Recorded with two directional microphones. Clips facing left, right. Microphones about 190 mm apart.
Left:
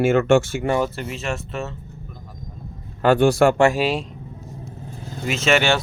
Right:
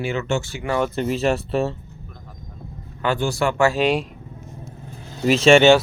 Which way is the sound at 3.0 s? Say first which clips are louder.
Left 7 dB; 55° left (ahead or behind).